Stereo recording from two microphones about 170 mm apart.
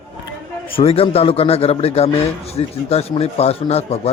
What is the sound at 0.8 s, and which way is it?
A man's voice, 35° left (ahead or behind).